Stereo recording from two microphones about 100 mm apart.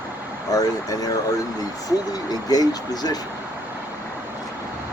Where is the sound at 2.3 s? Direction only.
40° left (ahead or behind).